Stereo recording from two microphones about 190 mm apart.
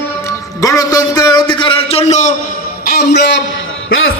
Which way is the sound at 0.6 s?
15° left (ahead or behind).